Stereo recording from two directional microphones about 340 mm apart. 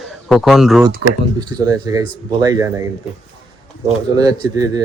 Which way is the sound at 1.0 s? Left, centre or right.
Right.